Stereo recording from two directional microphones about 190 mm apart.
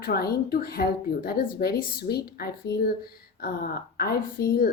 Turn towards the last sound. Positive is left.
turn(degrees=55)  # may be behind; listen again after turning